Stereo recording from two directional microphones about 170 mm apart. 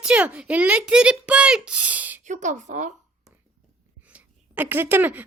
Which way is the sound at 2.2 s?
45° right (ahead or behind).